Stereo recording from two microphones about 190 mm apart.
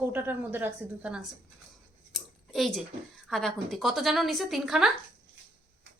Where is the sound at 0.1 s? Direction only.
10° right (ahead or behind).